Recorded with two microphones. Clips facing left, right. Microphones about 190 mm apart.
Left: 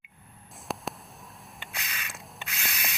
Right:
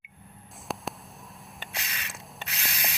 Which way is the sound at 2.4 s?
35° right (ahead or behind).